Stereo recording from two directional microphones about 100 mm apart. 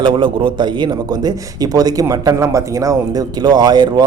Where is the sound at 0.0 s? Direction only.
55° right (ahead or behind).